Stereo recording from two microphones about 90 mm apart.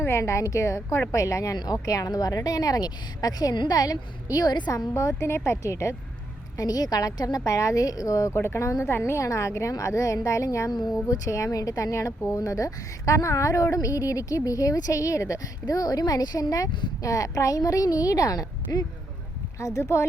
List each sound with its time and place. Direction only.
0.0 s a woman's voice: 30° left (ahead or behind); by 4.7 s 50° left (ahead or behind)
4.7 s a woman's voice: 35° left (ahead or behind)
6.6 s a woman's voice: 45° left (ahead or behind)
10.7 s speech: 50° left (ahead or behind)
11.1 s a woman's voice: 35° left (ahead or behind)